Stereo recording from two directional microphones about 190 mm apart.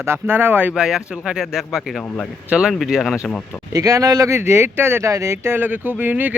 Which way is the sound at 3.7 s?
20° right (ahead or behind).